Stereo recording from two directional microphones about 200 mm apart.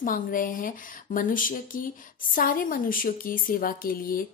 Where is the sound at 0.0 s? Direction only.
45° left (ahead or behind).